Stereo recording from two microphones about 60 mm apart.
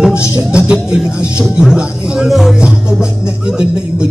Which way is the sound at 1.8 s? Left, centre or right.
Centre.